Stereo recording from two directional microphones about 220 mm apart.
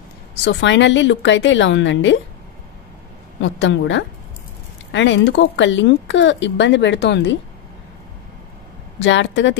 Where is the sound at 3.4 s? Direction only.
55° left (ahead or behind).